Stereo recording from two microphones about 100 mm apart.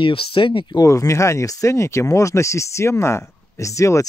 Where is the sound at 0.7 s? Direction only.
30° left (ahead or behind).